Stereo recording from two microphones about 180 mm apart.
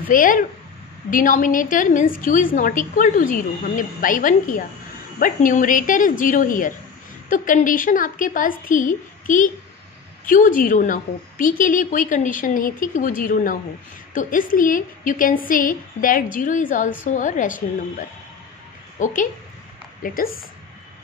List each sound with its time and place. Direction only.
0.1 s a woman's voice: 50° left (ahead or behind)
19.0 s a woman's voice: 45° left (ahead or behind)